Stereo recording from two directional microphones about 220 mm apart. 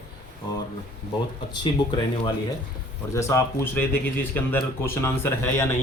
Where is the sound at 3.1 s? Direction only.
15° left (ahead or behind).